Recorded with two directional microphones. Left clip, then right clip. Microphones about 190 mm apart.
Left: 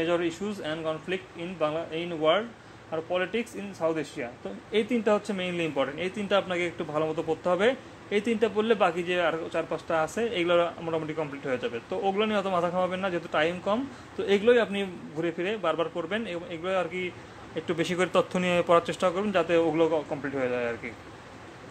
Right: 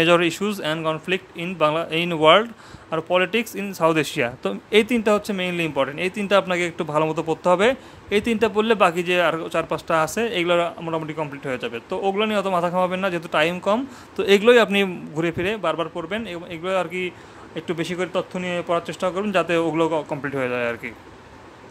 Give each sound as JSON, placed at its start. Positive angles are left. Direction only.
{"t": 0.0, "sound": "a man's voice", "side_deg": -40}
{"t": 4.6, "sound": "speech", "side_deg": -30}
{"t": 17.6, "sound": "speech", "side_deg": -10}